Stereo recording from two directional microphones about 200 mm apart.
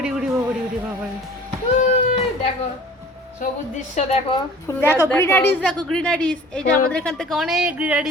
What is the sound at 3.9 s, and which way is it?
Speech, 30° left (ahead or behind).